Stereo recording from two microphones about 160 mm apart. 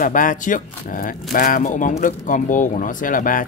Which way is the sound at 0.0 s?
55° left (ahead or behind).